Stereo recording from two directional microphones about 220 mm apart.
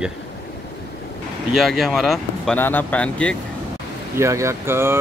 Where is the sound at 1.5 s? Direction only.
Centre (ahead or behind).